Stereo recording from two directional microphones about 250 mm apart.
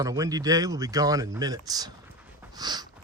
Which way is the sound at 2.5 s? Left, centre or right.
Centre.